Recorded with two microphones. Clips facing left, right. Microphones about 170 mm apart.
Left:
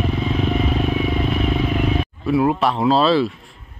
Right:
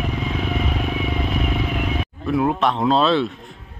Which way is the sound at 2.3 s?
5° left (ahead or behind).